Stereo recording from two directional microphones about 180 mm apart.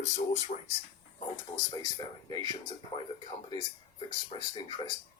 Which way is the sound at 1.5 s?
25° left (ahead or behind).